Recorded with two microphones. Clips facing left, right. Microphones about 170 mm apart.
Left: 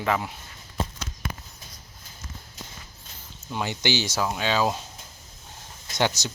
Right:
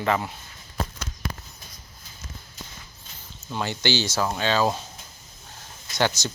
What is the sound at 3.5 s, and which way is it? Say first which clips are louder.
Speech: right 1 dB; 15° left (ahead or behind).